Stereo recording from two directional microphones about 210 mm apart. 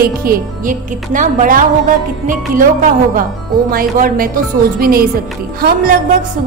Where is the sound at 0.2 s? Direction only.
40° right (ahead or behind).